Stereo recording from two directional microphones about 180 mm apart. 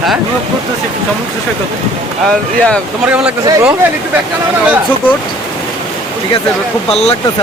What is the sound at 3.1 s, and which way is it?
Speech, 5° right (ahead or behind).